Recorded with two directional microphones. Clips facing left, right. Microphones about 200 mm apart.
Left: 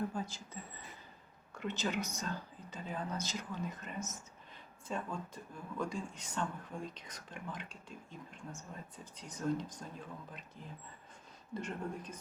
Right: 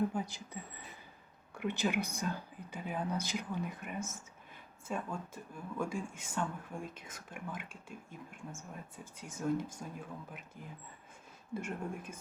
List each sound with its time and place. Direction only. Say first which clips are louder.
0.1 s speech: right 3 dB; 15° right (ahead or behind)